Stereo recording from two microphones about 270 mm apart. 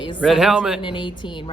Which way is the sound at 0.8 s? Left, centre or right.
Centre.